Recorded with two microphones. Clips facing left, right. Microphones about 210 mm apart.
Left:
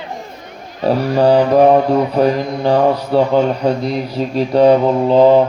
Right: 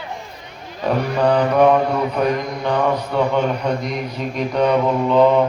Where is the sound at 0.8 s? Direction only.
35° left (ahead or behind).